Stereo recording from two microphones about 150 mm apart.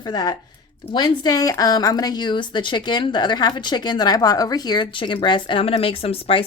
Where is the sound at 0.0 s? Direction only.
25° left (ahead or behind).